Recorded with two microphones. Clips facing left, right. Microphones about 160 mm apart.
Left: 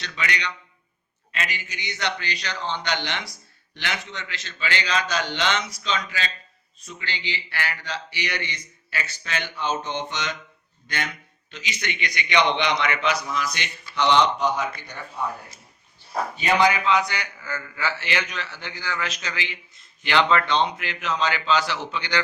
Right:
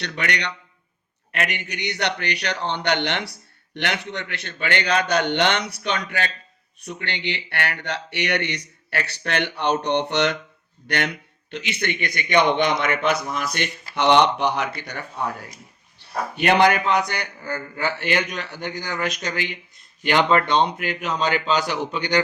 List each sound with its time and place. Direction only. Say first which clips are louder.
0.0 s a man's voice: right 3 dB; 60° right (ahead or behind); by 22.2 s 45° right (ahead or behind)